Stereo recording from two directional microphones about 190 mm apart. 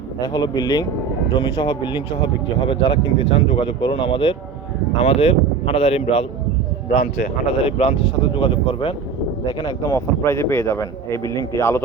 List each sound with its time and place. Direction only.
0.3 s a man's voice: 20° left (ahead or behind)
6.9 s speech: 45° left (ahead or behind)
7.8 s a man's voice: 30° left (ahead or behind); by 11.8 s 15° left (ahead or behind)